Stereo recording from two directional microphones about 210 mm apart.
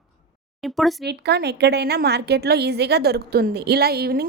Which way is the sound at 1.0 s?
50° right (ahead or behind).